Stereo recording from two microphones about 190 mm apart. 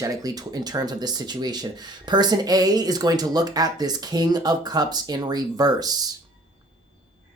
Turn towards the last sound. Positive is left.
turn(degrees=-20)  # may be behind; listen again after turning